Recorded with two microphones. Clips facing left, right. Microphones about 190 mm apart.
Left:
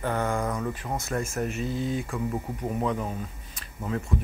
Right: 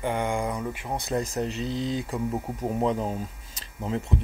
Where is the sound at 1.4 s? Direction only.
30° right (ahead or behind).